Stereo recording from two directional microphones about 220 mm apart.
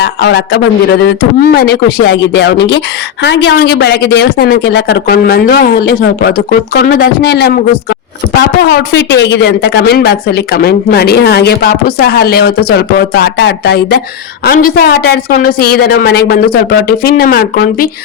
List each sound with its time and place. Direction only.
0.0 s speech: 50° left (ahead or behind)